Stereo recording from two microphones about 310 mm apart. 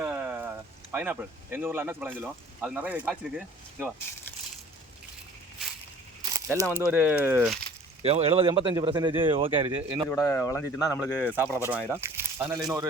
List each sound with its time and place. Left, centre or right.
0.0 s speech: centre
6.3 s speech: centre
8.0 s speech: centre
10.1 s speech: centre
11.3 s speech: centre